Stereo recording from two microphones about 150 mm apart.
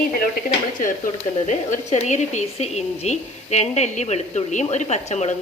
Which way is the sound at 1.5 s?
50° left (ahead or behind).